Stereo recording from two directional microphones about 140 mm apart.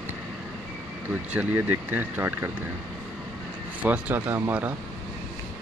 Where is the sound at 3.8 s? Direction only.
10° right (ahead or behind).